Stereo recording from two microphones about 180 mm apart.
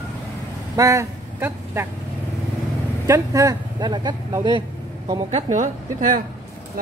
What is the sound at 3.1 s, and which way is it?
Speech, 20° right (ahead or behind).